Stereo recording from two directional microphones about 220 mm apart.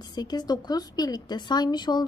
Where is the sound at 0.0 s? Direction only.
20° left (ahead or behind).